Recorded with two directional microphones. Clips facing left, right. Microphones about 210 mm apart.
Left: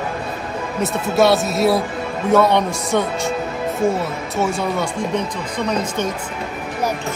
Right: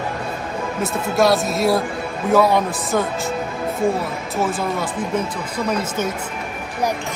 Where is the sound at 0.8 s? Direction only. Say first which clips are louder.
Left 2 dB; centre (ahead or behind).